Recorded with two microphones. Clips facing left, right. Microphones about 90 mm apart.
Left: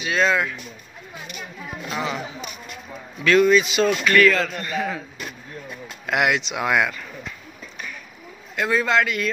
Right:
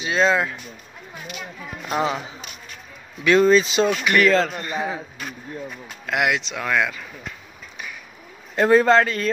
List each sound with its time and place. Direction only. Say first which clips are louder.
0.0 s a man's voice: right 1 dB; 25° right (ahead or behind)
1.9 s a man's voice: right 5 dB; 40° right (ahead or behind)
3.3 s a man's voice: right 1 dB; 30° right (ahead or behind)
4.6 s a man's voice: even; 20° right (ahead or behind)
6.0 s speech: left 1 dB; centre (ahead or behind)
8.5 s a man's voice: right 5 dB; 40° right (ahead or behind)